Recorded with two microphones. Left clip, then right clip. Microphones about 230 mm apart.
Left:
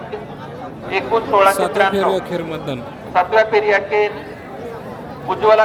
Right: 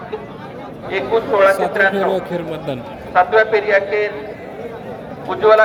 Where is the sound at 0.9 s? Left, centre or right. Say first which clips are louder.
Even; left.